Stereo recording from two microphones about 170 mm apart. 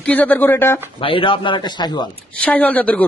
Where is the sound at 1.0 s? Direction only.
30° left (ahead or behind).